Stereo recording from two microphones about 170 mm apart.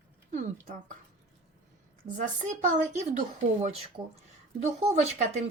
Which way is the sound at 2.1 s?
45° right (ahead or behind).